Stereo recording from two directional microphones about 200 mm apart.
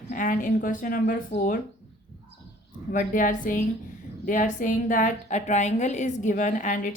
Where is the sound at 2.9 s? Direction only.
40° left (ahead or behind).